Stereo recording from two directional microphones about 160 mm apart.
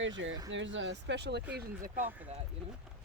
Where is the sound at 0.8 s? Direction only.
90° right.